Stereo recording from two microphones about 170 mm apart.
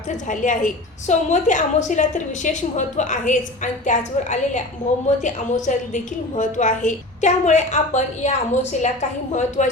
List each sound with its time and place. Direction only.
0.3 s a woman's voice: 45° left (ahead or behind)